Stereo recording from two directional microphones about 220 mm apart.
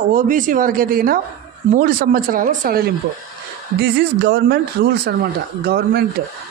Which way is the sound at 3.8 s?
50° right (ahead or behind).